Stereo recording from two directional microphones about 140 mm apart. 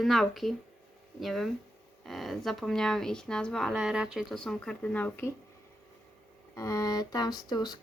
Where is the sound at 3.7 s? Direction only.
5° right (ahead or behind); by 5.3 s 15° left (ahead or behind).